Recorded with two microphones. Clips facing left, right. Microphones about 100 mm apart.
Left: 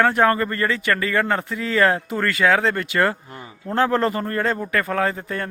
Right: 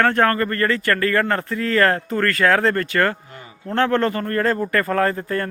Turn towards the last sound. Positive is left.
turn(degrees=5)  # may be behind; listen again after turning